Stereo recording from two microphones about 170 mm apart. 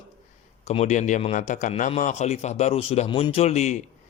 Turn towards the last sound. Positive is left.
turn(degrees=40)  # may be behind; listen again after turning